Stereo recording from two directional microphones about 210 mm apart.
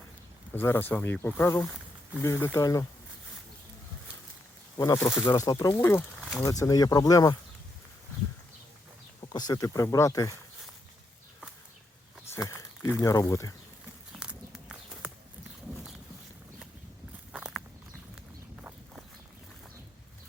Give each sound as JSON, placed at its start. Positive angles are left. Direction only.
{"t": 0.5, "sound": "speech", "side_deg": 10}
{"t": 4.8, "sound": "speech", "side_deg": 15}
{"t": 9.3, "sound": "speech", "side_deg": 20}
{"t": 12.3, "sound": "speech", "side_deg": 10}
{"t": 14.1, "sound": "a sound", "side_deg": -5}
{"t": 17.3, "sound": "walk", "side_deg": -5}